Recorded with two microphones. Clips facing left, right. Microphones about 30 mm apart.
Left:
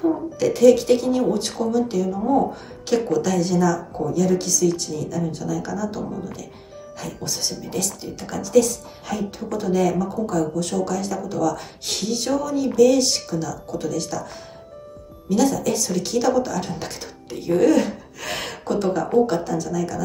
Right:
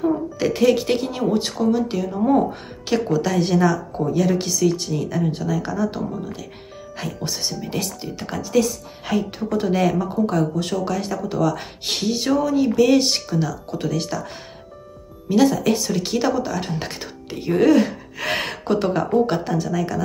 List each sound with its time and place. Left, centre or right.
0.0 s speech: right
2.9 s speech: right
3.3 s speech: right
7.6 s speech: right
15.2 s speech: right